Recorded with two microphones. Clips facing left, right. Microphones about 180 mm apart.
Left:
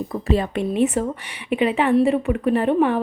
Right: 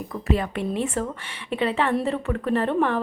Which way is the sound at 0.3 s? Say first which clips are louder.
Left 3 dB; 25° left (ahead or behind).